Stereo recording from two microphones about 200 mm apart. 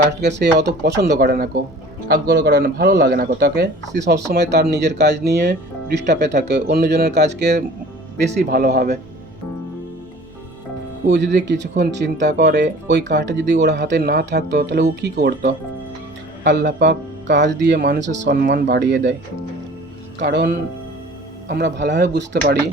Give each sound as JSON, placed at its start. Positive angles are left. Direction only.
{"t": 0.1, "sound": "speech", "side_deg": -60}
{"t": 11.1, "sound": "speech", "side_deg": -55}
{"t": 20.1, "sound": "speech", "side_deg": -55}